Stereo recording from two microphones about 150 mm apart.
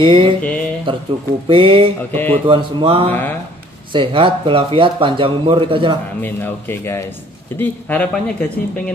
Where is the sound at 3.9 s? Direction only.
35° right (ahead or behind).